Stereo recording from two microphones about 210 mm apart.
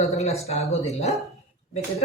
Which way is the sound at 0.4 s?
30° left (ahead or behind).